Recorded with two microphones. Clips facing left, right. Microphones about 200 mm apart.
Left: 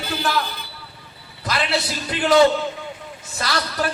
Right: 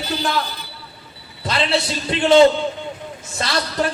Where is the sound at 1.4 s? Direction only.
25° right (ahead or behind).